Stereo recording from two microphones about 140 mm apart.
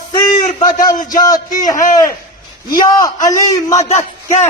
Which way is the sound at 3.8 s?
55° left (ahead or behind).